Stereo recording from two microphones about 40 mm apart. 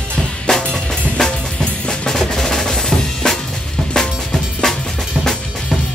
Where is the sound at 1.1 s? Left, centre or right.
Centre.